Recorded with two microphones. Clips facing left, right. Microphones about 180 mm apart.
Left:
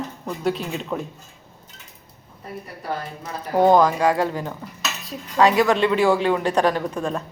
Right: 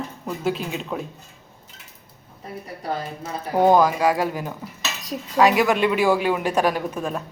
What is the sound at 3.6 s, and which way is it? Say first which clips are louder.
Speech: left 1 dB; 10° right (ahead or behind).